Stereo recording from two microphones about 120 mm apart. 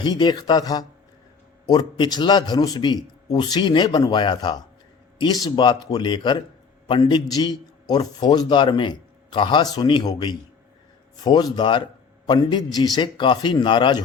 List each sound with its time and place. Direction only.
0.0 s a man's voice: 40° left (ahead or behind)